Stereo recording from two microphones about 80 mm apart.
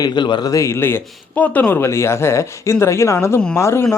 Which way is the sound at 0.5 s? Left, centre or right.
Left.